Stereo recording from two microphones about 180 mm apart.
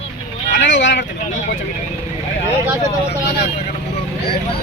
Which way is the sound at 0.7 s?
90° left.